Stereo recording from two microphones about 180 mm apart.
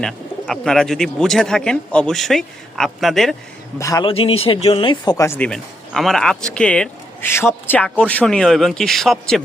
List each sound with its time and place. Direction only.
0.0 s speech: centre (ahead or behind)
3.8 s speech: 20° left (ahead or behind)
4.1 s speech: 30° left (ahead or behind); by 9.4 s centre (ahead or behind)